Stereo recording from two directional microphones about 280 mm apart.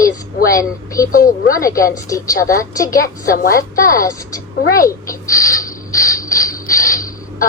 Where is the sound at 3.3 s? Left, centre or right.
Left.